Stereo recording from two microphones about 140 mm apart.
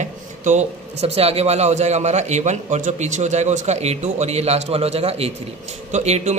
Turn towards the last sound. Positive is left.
turn(degrees=-55)  # may be behind; listen again after turning